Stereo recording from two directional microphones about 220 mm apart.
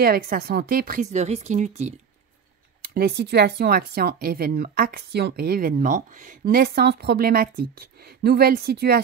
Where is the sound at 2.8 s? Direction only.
45° right (ahead or behind).